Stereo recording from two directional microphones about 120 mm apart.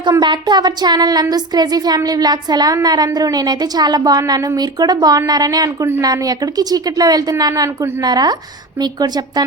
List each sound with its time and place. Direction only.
0.0 s a woman's voice: 40° right (ahead or behind)